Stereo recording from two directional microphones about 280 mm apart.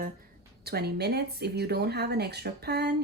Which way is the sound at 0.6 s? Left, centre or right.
Right.